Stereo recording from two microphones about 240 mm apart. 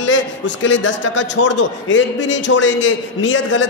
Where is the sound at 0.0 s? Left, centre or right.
Left.